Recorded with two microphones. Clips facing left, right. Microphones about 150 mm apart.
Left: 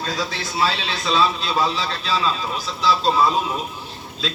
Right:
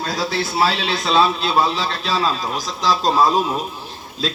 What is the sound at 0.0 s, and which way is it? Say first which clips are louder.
A man's voice: right 4 dB; 35° right (ahead or behind).